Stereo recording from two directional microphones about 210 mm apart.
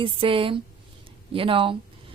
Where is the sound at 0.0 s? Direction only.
25° right (ahead or behind).